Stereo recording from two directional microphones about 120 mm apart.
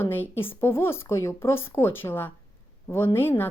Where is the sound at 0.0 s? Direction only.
20° left (ahead or behind).